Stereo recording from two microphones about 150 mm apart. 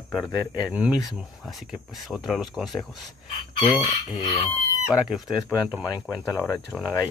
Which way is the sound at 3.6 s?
30° left (ahead or behind).